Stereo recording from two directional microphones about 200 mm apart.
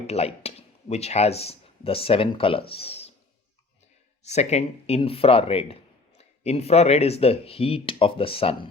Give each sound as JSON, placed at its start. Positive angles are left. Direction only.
{"t": 0.1, "sound": "speech", "side_deg": 30}
{"t": 4.2, "sound": "speech", "side_deg": 35}